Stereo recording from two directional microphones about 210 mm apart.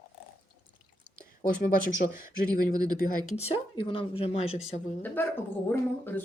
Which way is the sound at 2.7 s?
20° right (ahead or behind).